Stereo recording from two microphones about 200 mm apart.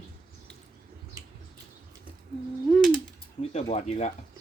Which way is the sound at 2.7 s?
Centre (ahead or behind).